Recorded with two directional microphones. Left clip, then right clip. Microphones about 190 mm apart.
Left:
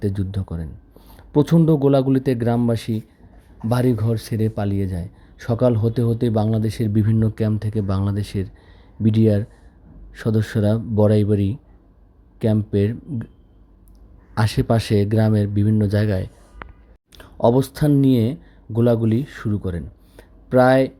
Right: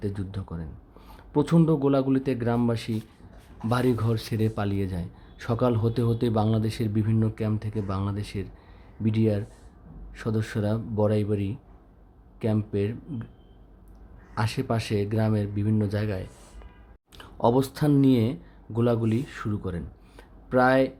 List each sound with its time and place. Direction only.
0.0 s speech: 25° left (ahead or behind)
14.3 s speech: 30° left (ahead or behind)